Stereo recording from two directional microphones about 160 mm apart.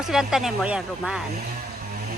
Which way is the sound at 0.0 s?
5° right (ahead or behind).